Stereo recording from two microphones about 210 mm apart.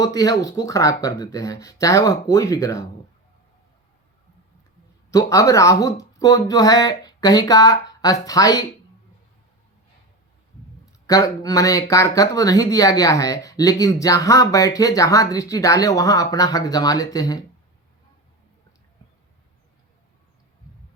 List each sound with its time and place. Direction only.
0.0 s speech: 15° left (ahead or behind)
5.1 s speech: 15° left (ahead or behind)
11.0 s speech: 15° left (ahead or behind)